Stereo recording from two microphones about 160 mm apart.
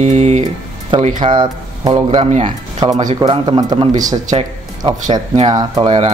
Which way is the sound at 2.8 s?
25° right (ahead or behind).